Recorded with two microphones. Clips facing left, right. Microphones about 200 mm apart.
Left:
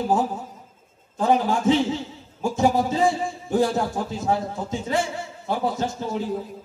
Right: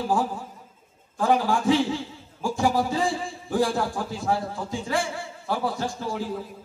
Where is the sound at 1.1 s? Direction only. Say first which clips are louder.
Left 2 dB; 20° left (ahead or behind).